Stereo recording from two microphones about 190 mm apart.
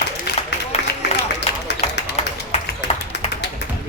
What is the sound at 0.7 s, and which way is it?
Music, 35° left (ahead or behind).